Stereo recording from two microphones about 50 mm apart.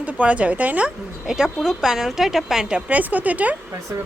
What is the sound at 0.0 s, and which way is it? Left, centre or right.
Speech, right.